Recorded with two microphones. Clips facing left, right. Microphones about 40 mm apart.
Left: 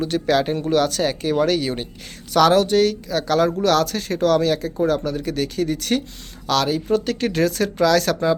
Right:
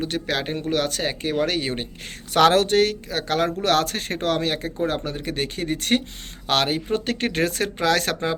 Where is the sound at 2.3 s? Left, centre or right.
Right.